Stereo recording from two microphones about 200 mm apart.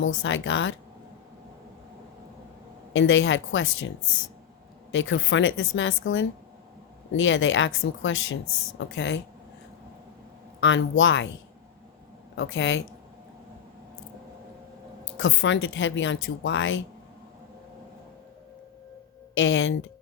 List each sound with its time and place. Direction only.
0.0 s a woman's voice: 70° left (ahead or behind)
2.9 s a woman's voice: 65° left (ahead or behind)
8.8 s speech: 65° left (ahead or behind)
10.6 s a woman's voice: 65° left (ahead or behind)
12.4 s a woman's voice: 65° left (ahead or behind)
15.2 s a woman's voice: 70° left (ahead or behind)
19.3 s a woman's voice: 70° left (ahead or behind)